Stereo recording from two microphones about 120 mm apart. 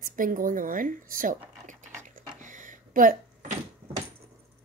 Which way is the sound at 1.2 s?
90° right.